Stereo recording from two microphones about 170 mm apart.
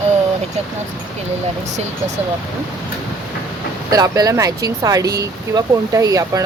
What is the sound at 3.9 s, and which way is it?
Speech, 20° right (ahead or behind).